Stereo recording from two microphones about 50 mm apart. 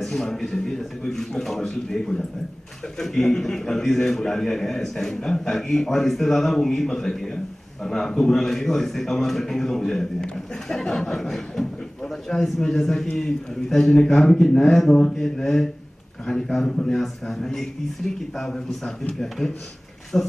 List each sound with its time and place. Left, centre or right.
0.0 s a man's voice: centre
20.1 s a man's voice: centre